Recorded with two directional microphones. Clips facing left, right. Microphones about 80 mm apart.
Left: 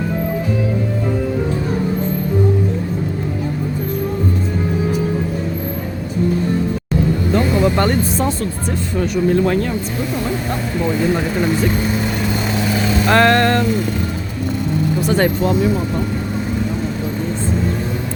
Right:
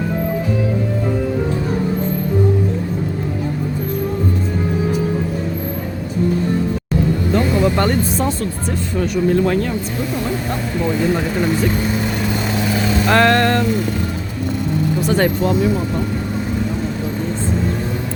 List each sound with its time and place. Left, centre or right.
7.3 s music: left
9.0 s speech: left
10.2 s speech: centre
12.5 s vehicle: centre
13.1 s vehicle: left
15.0 s speech: centre